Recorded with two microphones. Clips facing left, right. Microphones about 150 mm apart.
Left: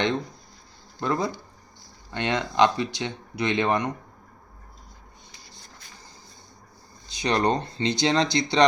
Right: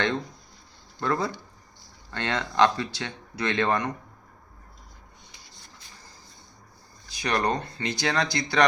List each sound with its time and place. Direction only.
0.9 s speech: 15° left (ahead or behind)
7.1 s speech: 20° left (ahead or behind)